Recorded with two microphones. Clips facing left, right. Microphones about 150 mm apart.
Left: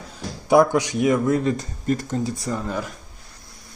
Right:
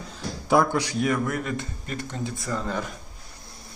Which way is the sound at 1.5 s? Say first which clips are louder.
Left 9 dB; 40° left (ahead or behind).